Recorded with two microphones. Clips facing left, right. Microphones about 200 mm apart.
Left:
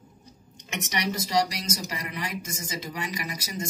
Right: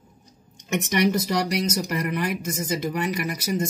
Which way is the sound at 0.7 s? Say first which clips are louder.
Right 9 dB; 55° right (ahead or behind).